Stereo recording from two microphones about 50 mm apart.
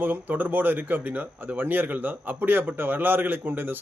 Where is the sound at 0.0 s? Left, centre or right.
Right.